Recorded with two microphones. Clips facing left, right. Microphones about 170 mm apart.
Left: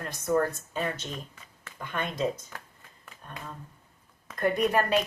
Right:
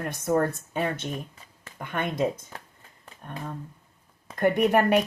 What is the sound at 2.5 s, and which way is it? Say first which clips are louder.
Speech: right 2 dB; 30° right (ahead or behind).